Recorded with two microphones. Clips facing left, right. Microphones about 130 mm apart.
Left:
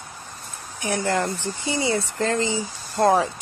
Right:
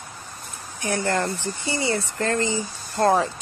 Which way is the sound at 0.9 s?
15° left (ahead or behind).